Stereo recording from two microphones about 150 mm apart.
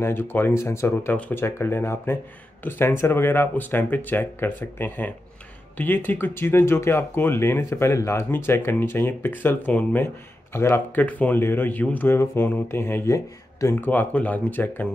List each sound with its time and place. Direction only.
0.0 s speech: 15° left (ahead or behind)